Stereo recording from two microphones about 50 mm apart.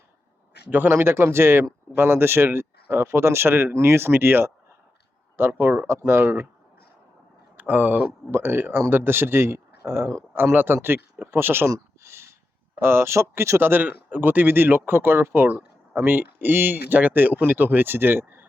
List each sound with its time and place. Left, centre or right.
0.7 s speech: right
7.5 s speech: right
8.3 s speech: right
11.3 s speech: right
11.7 s a sound: right
12.8 s speech: right
13.6 s speech: right